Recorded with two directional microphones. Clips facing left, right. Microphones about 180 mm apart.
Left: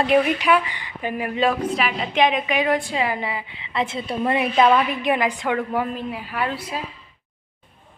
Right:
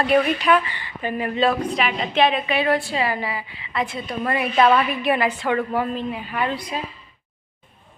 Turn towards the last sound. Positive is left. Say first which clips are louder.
# right 1 dB
turn(degrees=5)  # may be behind; listen again after turning